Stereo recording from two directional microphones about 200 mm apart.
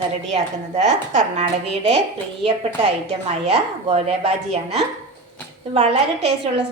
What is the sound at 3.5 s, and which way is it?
A woman's voice, 30° right (ahead or behind).